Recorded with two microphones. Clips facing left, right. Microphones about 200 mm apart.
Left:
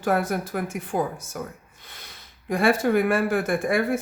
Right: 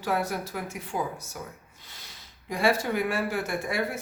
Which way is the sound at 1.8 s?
55° left (ahead or behind).